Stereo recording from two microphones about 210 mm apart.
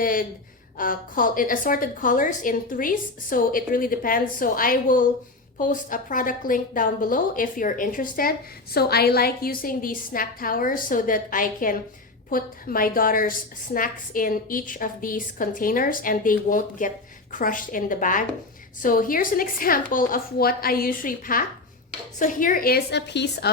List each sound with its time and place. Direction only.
0.0 s a woman's voice: 40° left (ahead or behind)